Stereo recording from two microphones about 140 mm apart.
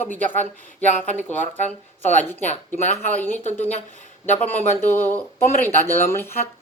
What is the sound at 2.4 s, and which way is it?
Speech, 55° left (ahead or behind).